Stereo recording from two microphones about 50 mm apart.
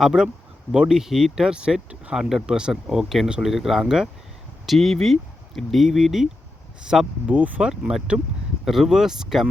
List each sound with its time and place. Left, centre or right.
0.0 s speech: centre
7.3 s speech: right
7.6 s speech: centre